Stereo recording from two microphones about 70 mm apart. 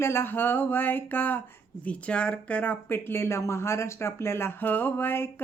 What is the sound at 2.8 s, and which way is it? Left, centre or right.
Speech, left.